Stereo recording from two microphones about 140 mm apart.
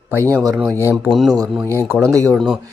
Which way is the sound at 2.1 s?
20° right (ahead or behind).